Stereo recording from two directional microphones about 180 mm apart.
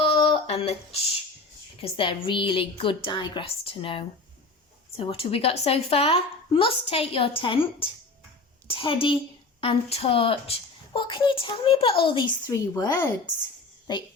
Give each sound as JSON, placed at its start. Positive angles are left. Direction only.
{"t": 0.0, "sound": "a sound", "side_deg": 30}
{"t": 1.8, "sound": "a woman's voice", "side_deg": 30}
{"t": 8.6, "sound": "a woman's voice", "side_deg": 30}